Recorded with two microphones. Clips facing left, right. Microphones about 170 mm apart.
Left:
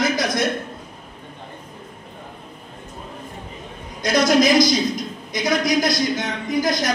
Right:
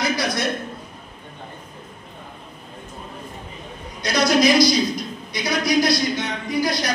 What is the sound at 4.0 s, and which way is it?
A woman's voice, 45° left (ahead or behind).